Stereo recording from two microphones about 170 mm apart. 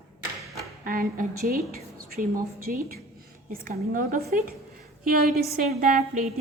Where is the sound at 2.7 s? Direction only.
60° right (ahead or behind).